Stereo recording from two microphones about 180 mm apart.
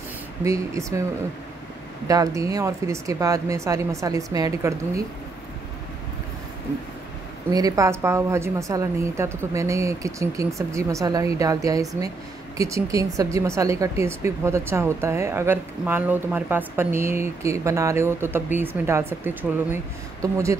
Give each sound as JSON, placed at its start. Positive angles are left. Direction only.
{"t": 0.4, "sound": "speech", "side_deg": -15}
{"t": 2.0, "sound": "speech", "side_deg": -20}
{"t": 7.5, "sound": "speech", "side_deg": -20}